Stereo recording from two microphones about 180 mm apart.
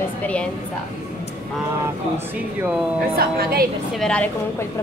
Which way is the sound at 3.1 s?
55° right (ahead or behind).